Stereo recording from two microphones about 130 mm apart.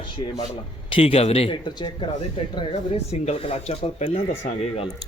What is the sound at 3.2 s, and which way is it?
Speech, 55° left (ahead or behind).